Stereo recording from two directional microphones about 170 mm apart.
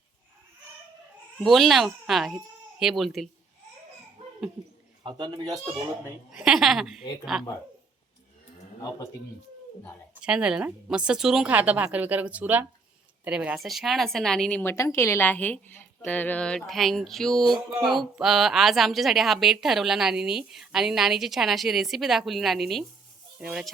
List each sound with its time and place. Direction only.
1.4 s speech: centre (ahead or behind)
5.0 s a man's voice: 25° right (ahead or behind)
6.3 s a woman's voice: 5° right (ahead or behind)
10.2 s a woman's voice: 5° right (ahead or behind)